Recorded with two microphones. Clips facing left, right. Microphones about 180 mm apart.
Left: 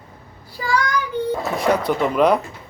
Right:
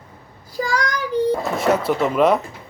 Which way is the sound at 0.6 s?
40° right (ahead or behind).